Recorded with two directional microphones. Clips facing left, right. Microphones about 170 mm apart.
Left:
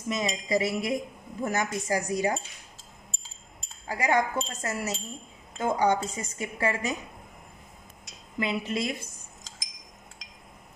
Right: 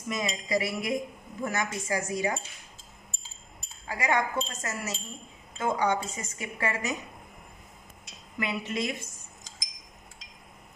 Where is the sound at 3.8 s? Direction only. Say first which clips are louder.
Left 2 dB; 35° left (ahead or behind).